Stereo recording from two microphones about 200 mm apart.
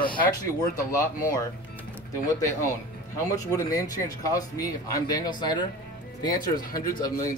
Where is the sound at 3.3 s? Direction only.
15° left (ahead or behind).